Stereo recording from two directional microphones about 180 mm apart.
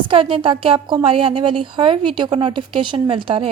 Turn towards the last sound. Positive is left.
turn(degrees=-30)  # may be behind; listen again after turning